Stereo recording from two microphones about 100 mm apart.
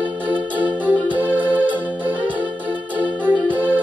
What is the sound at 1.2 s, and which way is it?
Organ, 15° right (ahead or behind).